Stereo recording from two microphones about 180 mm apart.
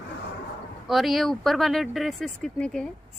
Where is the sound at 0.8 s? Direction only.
Centre (ahead or behind).